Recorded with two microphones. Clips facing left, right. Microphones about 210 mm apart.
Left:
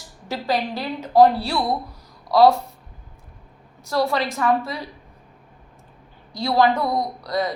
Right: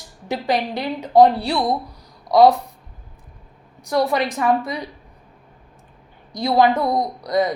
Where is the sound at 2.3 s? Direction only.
20° right (ahead or behind).